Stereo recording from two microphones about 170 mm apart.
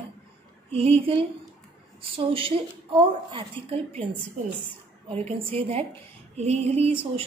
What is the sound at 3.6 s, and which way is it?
Speech, 30° right (ahead or behind).